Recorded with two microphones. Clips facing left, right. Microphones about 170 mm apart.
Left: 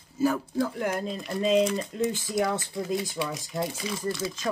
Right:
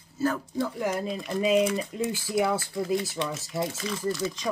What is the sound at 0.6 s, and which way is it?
Speech, centre (ahead or behind).